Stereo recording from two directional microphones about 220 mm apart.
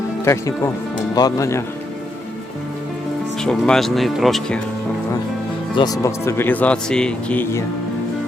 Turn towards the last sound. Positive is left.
turn(degrees=5)  # may be behind; listen again after turning